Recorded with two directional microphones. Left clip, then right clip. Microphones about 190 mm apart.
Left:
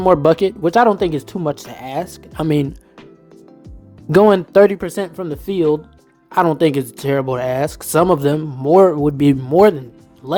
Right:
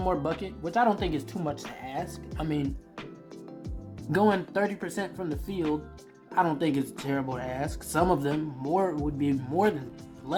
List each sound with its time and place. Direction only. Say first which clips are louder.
0.0 s speech: left 17 dB; 50° left (ahead or behind)
4.1 s speech: left 14 dB; 55° left (ahead or behind)
9.4 s speech: left 16 dB; 45° left (ahead or behind)